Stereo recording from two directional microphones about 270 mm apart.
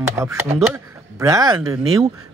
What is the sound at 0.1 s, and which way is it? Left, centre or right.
Speech, centre.